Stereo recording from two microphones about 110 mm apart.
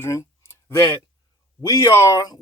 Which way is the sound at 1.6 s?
30° left (ahead or behind).